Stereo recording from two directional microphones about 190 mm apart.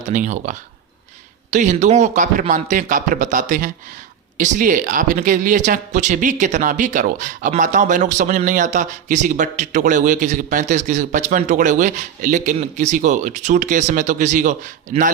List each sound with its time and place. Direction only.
0.1 s speech: 40° right (ahead or behind)